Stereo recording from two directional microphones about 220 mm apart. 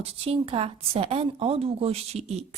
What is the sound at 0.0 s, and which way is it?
A woman's voice, 25° right (ahead or behind).